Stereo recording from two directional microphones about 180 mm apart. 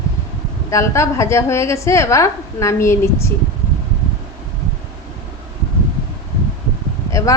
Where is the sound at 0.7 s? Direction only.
15° left (ahead or behind).